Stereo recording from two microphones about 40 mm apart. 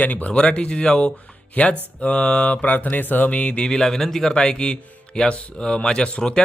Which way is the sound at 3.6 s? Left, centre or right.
Centre.